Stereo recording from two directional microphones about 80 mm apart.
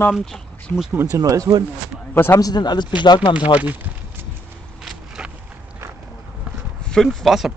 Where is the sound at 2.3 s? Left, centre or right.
Left.